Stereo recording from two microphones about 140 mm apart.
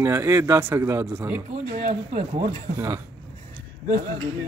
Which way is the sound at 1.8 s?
65° right (ahead or behind).